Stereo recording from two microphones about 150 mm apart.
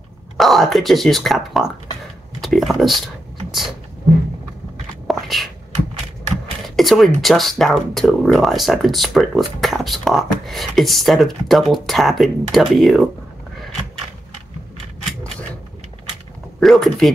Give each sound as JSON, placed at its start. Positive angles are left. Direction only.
{"t": 0.4, "sound": "speech", "side_deg": 0}
{"t": 5.0, "sound": "a sound", "side_deg": 0}
{"t": 6.8, "sound": "speech", "side_deg": 0}
{"t": 16.5, "sound": "speech", "side_deg": 0}